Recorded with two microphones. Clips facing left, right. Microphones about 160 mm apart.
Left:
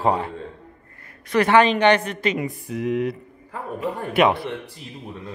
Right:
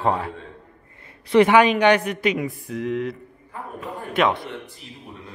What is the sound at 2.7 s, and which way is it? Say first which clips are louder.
A man's voice: left 4 dB; 5° left (ahead or behind).